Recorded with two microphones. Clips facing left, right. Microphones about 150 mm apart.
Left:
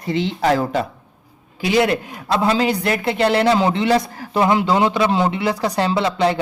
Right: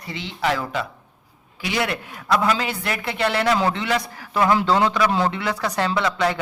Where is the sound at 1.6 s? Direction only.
30° left (ahead or behind).